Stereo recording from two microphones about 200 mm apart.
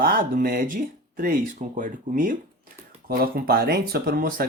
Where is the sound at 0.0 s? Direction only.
45° right (ahead or behind).